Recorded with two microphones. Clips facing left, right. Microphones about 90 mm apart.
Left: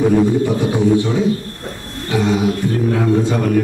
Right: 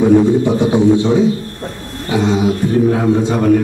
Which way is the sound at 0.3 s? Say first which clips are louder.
Right 4 dB; 20° right (ahead or behind).